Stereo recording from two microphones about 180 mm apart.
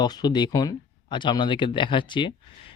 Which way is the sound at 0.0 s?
25° left (ahead or behind).